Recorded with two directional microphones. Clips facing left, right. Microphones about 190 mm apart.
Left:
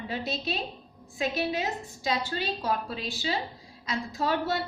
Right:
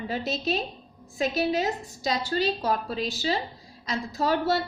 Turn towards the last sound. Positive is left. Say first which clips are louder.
# right 3 dB
turn(degrees=-40)  # may be behind; listen again after turning